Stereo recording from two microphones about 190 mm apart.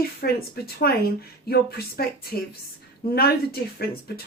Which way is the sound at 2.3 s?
55° left (ahead or behind).